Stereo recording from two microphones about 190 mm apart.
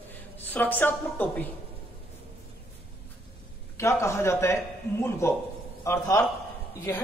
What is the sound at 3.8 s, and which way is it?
Speech, 15° left (ahead or behind).